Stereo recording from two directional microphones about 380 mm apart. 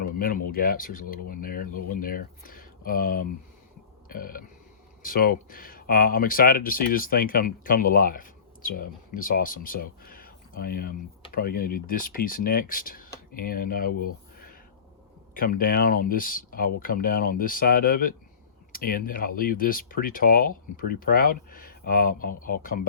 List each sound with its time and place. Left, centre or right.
0.5 s speech: left
15.4 s speech: left